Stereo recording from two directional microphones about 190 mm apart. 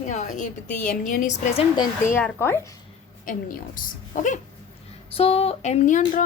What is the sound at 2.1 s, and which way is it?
Speech, 10° left (ahead or behind).